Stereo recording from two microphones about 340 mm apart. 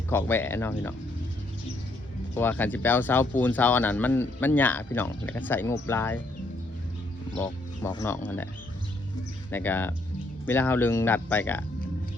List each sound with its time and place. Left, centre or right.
0.1 s speech: centre
2.3 s speech: centre
7.3 s speech: centre
9.5 s speech: centre